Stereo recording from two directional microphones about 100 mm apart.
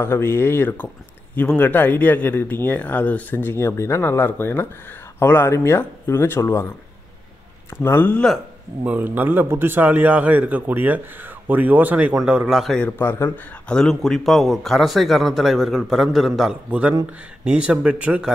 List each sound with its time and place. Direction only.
0.0 s speech: 25° left (ahead or behind)
7.7 s a man's voice: 20° left (ahead or behind)
8.8 s speech: 15° right (ahead or behind)
12.7 s speech: 15° left (ahead or behind); by 18.3 s 10° right (ahead or behind)